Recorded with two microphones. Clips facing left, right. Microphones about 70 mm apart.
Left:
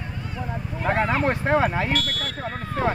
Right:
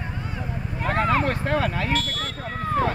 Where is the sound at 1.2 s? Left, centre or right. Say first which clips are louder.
Left 3 dB; left.